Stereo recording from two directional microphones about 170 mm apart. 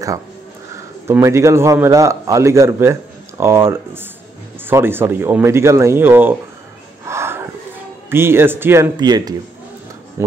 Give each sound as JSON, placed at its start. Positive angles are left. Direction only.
{"t": 1.0, "sound": "a man's voice", "side_deg": -15}
{"t": 7.1, "sound": "a sound", "side_deg": -15}
{"t": 8.1, "sound": "a man's voice", "side_deg": -15}
{"t": 8.9, "sound": "speech", "side_deg": -25}